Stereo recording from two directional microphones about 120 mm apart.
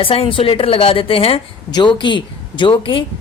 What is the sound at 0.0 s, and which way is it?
Speech, 50° left (ahead or behind).